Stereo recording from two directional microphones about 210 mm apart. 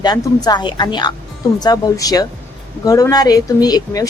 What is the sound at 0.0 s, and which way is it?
A woman's voice, 20° left (ahead or behind).